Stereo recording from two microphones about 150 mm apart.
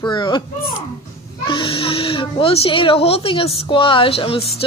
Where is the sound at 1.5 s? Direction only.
35° left (ahead or behind).